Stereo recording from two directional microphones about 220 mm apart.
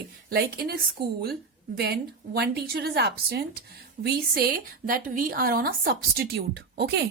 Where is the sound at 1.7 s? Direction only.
45° right (ahead or behind).